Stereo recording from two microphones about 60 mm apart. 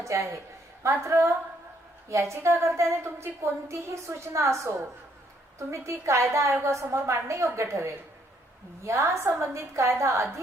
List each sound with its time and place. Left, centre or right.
0.0 s a woman's voice: right